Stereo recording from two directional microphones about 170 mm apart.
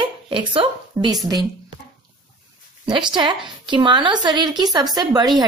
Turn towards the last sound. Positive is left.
turn(degrees=-25)  # may be behind; listen again after turning